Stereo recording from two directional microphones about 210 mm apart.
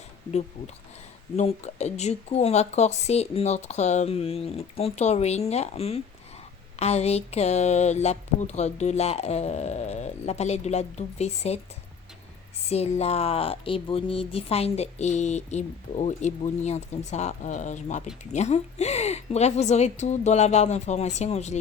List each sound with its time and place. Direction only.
1.4 s speech: 30° left (ahead or behind)
12.6 s speech: 30° left (ahead or behind)